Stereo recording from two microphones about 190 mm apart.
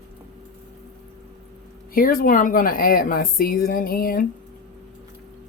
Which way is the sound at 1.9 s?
50° left (ahead or behind).